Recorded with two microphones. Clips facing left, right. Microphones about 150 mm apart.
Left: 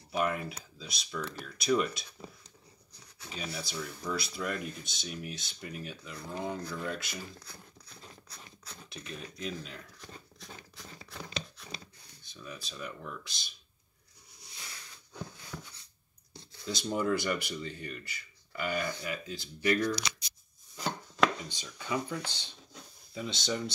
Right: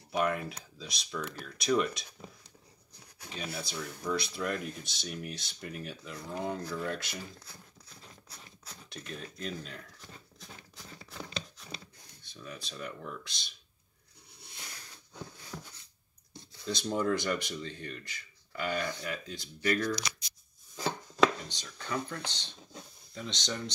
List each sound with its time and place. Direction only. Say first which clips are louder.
0.1 s speech: right 1 dB; 5° left (ahead or behind)
8.8 s speech: right 1 dB; centre (ahead or behind)
11.6 s a sound: even; centre (ahead or behind)
15.5 s a sound: even; 25° right (ahead or behind)
16.6 s speech: right 1 dB; 5° left (ahead or behind)
20.7 s chopping: right 2 dB; centre (ahead or behind)
23.1 s speech: left 3 dB; 5° left (ahead or behind)